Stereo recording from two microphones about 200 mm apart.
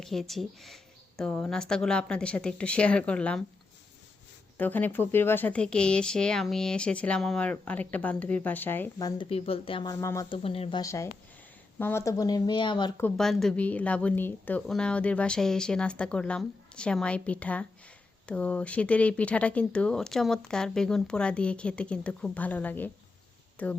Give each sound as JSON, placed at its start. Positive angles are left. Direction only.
{"t": 0.0, "sound": "a woman's voice", "side_deg": 0}
{"t": 4.5, "sound": "speech", "side_deg": 10}
{"t": 10.3, "sound": "speech", "side_deg": 30}
{"t": 13.0, "sound": "a woman's voice", "side_deg": 5}